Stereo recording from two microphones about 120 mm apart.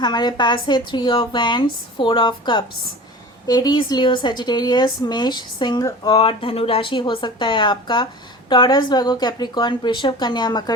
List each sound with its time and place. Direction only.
0.0 s a woman's voice: 40° left (ahead or behind)